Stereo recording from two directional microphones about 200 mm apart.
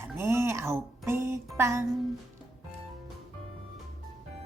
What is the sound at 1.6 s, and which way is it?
Speech, 15° right (ahead or behind).